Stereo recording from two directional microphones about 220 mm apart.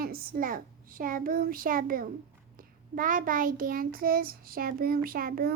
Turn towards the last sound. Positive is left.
turn(degrees=-40)  # may be behind; listen again after turning